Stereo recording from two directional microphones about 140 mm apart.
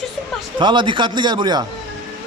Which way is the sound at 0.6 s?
35° right (ahead or behind).